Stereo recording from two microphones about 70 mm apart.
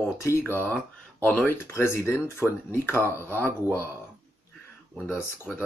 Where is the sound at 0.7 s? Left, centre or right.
Left.